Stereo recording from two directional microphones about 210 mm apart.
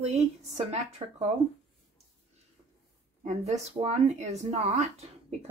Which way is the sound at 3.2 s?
35° right (ahead or behind).